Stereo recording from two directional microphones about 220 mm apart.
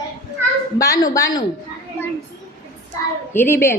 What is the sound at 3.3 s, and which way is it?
Speech, 10° left (ahead or behind).